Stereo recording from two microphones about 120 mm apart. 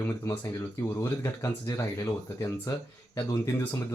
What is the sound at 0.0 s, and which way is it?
Speech, 20° left (ahead or behind).